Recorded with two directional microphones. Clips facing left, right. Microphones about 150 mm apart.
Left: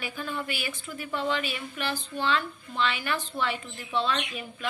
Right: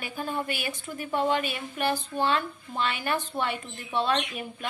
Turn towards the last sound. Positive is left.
turn(degrees=-50)  # may be behind; listen again after turning